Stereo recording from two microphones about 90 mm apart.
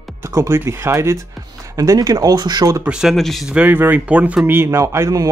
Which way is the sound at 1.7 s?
40° right (ahead or behind).